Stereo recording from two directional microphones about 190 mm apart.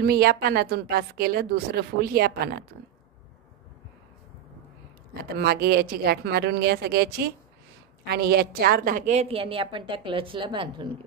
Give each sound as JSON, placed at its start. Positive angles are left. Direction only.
{"t": 0.0, "sound": "a woman's voice", "side_deg": -55}
{"t": 5.4, "sound": "a woman's voice", "side_deg": -55}